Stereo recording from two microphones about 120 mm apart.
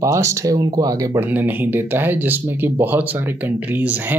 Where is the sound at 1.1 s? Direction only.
15° right (ahead or behind).